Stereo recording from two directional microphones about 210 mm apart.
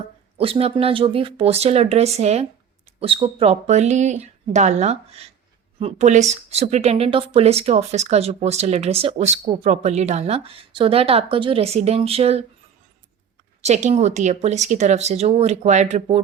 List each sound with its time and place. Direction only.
0.3 s a woman's voice: 25° right (ahead or behind)
13.6 s speech: 35° right (ahead or behind)